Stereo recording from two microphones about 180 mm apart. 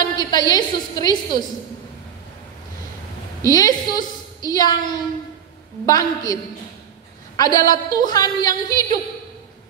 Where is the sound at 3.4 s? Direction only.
20° left (ahead or behind).